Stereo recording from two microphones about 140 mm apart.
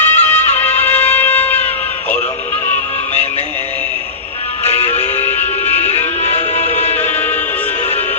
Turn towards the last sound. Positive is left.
turn(degrees=50)  # may be behind; listen again after turning